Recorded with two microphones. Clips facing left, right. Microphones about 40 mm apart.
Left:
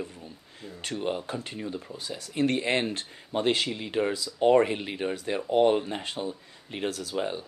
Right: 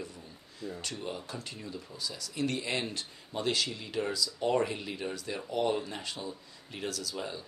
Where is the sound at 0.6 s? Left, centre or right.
Left.